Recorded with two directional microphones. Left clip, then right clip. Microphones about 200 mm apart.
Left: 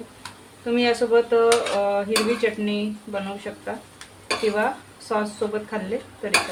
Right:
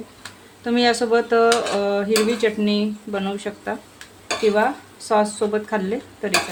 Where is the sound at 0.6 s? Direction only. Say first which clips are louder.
Right 2 dB; 55° right (ahead or behind).